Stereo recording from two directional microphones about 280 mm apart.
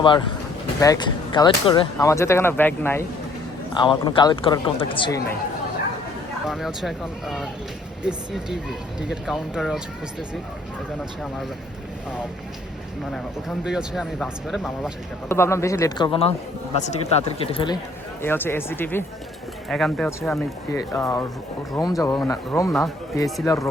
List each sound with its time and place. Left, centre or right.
0.0 s speech: centre
6.5 s speech: centre
13.1 s speech: centre
18.2 s speech: centre